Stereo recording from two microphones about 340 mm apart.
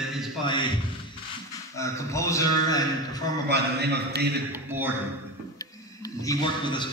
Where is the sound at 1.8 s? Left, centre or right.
Centre.